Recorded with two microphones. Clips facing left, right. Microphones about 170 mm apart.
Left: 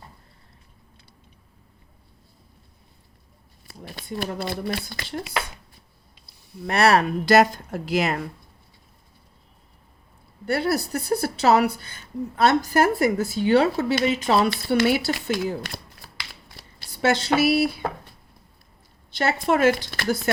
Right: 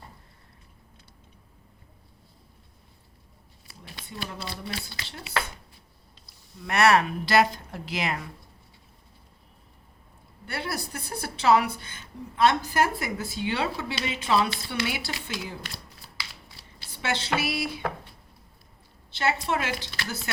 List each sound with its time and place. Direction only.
3.7 s speech: 50° left (ahead or behind)
6.7 s a woman's voice: 35° left (ahead or behind)
10.4 s a woman's voice: 40° left (ahead or behind)
19.1 s speech: 45° left (ahead or behind)